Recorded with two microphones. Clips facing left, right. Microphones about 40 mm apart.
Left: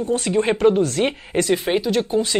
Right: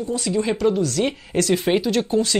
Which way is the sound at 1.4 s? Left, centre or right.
Centre.